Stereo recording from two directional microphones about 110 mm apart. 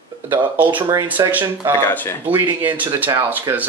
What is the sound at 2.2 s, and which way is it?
Speech, 15° right (ahead or behind).